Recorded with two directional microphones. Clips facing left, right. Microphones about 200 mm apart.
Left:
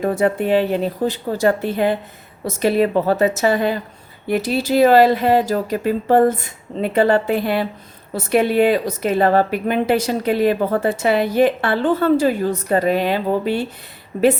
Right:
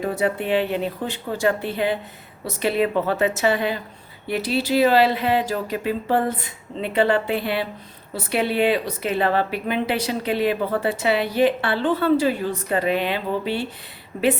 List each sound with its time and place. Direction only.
0.0 s a woman's voice: 50° left (ahead or behind)